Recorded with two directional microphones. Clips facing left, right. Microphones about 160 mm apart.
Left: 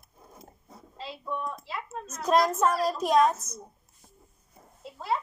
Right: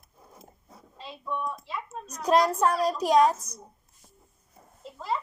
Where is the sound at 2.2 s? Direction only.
10° right (ahead or behind).